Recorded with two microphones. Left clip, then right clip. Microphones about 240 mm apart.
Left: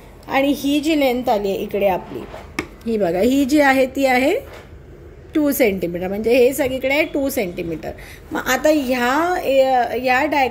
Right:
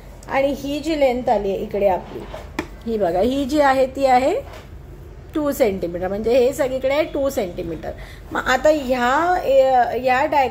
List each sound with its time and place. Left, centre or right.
0.3 s a woman's voice: left